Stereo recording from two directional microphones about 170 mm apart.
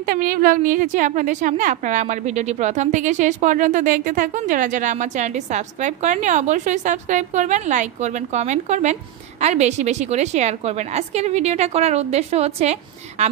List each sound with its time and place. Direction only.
0.0 s a woman's voice: 60° right (ahead or behind); by 13.3 s 40° right (ahead or behind)